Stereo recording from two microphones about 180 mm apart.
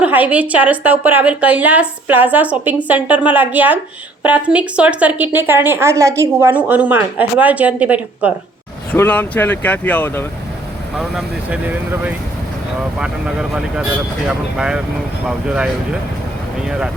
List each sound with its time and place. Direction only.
0.0 s a woman's voice: 10° right (ahead or behind)
8.9 s speech: 10° left (ahead or behind)
10.9 s a woman's voice: centre (ahead or behind)